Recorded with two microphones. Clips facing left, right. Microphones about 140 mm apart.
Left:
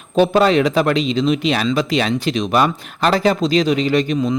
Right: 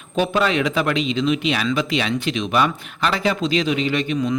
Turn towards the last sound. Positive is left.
turn(degrees=40)  # may be behind; listen again after turning